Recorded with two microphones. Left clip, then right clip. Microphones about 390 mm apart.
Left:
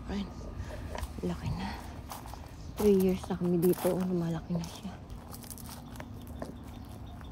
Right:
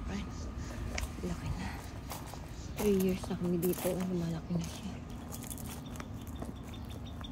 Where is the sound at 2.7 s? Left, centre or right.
Centre.